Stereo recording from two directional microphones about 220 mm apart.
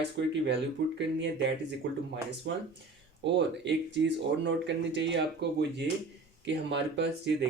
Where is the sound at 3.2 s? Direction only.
55° right (ahead or behind).